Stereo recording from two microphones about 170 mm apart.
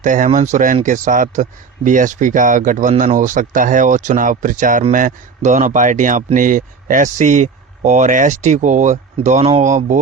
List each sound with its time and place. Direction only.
0.0 s speech: 50° right (ahead or behind)